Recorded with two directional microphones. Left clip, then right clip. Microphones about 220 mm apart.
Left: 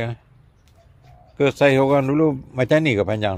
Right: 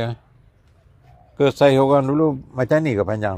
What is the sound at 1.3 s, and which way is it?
Speech, 15° right (ahead or behind).